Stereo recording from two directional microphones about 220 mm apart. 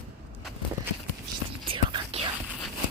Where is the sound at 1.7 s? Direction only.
25° right (ahead or behind).